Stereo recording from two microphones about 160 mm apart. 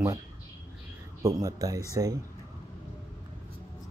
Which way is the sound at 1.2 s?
20° right (ahead or behind).